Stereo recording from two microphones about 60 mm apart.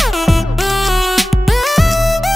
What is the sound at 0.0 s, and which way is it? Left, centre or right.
Music, centre.